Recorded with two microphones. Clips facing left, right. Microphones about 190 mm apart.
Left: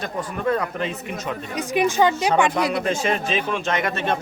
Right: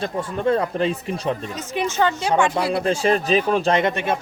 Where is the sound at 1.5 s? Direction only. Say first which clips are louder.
Left 8 dB; 15° left (ahead or behind).